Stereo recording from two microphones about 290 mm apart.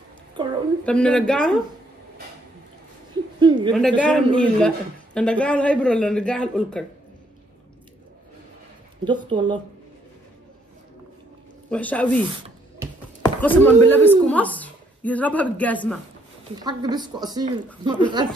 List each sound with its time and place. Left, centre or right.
0.8 s speech: centre
3.3 s a sound: centre
3.7 s speech: centre
9.0 s speech: centre
11.7 s speech: centre
13.2 s speech: centre
16.5 s speech: centre